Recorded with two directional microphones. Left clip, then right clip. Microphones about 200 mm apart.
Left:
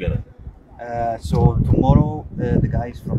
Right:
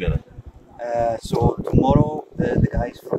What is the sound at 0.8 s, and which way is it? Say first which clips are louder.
Speech: right 2 dB; 5° left (ahead or behind).